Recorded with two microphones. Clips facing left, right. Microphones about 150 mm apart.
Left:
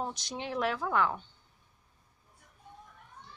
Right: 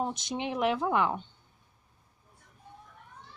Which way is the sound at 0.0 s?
20° right (ahead or behind).